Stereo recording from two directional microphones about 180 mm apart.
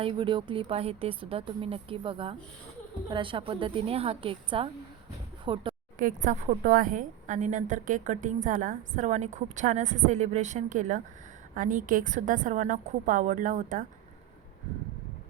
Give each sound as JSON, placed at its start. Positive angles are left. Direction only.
{"t": 0.0, "sound": "a woman's voice", "side_deg": -30}
{"t": 6.0, "sound": "a woman's voice", "side_deg": -45}